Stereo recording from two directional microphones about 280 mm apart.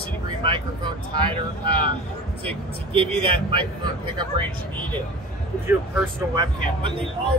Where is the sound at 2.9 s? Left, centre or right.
Centre.